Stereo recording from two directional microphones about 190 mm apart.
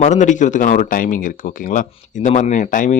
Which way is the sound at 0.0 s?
40° left (ahead or behind).